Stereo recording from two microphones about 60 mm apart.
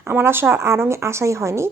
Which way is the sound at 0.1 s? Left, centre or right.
Right.